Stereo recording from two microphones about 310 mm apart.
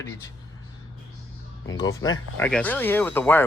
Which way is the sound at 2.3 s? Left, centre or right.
Centre.